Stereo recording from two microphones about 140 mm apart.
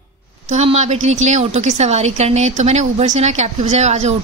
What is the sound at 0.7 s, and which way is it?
Speech, 55° right (ahead or behind).